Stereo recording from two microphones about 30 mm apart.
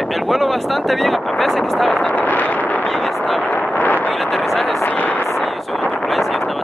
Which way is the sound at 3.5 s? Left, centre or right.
Left.